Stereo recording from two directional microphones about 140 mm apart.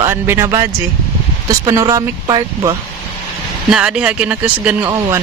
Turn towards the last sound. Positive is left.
turn(degrees=-10)  # may be behind; listen again after turning